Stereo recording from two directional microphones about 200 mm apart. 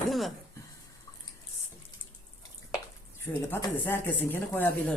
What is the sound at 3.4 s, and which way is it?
Speech, 15° left (ahead or behind).